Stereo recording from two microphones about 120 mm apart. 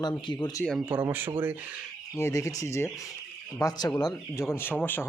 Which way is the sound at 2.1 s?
25° left (ahead or behind).